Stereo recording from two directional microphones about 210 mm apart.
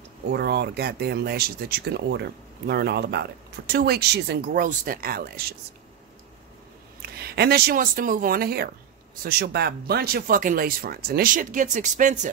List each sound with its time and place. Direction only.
0.3 s speech: 50° right (ahead or behind)
7.0 s speech: 50° right (ahead or behind)